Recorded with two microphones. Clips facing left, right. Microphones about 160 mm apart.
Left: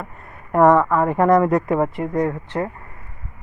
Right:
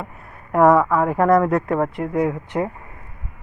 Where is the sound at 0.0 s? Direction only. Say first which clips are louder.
Right 1 dB; centre (ahead or behind).